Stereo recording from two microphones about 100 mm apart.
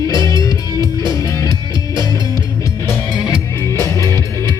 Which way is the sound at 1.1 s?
30° left (ahead or behind).